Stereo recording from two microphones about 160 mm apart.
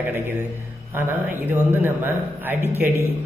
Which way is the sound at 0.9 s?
15° right (ahead or behind).